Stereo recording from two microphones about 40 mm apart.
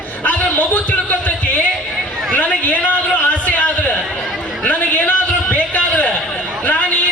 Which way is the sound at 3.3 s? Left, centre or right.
Left.